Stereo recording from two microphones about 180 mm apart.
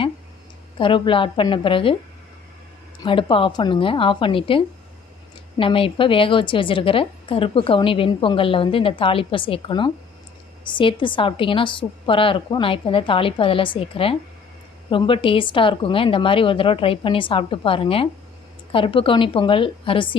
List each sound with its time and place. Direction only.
0.8 s a woman's voice: 30° left (ahead or behind)
3.0 s a woman's voice: 30° left (ahead or behind)